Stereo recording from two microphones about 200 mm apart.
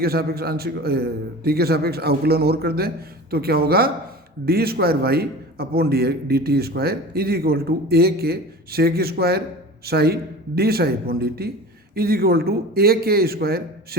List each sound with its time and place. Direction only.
0.0 s a man's voice: 50° right (ahead or behind)